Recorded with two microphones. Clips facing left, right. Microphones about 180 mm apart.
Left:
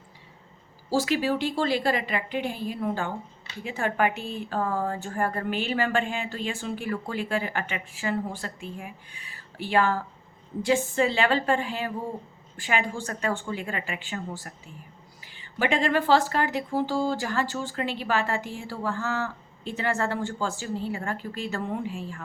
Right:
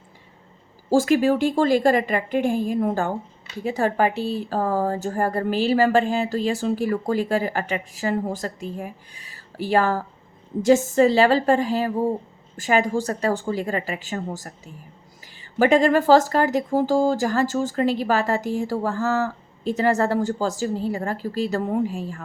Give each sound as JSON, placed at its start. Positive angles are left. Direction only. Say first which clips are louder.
{"t": 0.9, "sound": "a woman's voice", "louder": "right 7 dB", "side_deg": -45}